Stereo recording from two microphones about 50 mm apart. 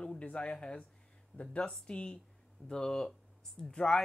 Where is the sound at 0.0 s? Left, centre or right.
Left.